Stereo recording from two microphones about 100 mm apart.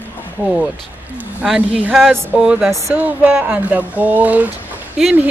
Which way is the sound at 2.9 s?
15° right (ahead or behind).